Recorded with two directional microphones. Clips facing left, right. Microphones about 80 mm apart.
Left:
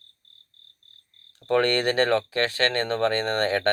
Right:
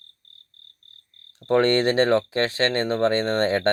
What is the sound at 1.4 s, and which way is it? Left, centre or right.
Speech, right.